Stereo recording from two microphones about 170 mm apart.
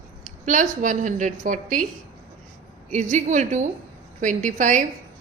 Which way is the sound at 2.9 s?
45° right (ahead or behind).